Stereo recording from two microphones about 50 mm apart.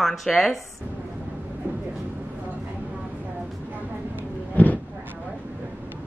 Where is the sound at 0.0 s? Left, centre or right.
Centre.